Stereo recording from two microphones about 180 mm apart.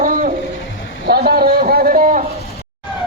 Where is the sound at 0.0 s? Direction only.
50° right (ahead or behind).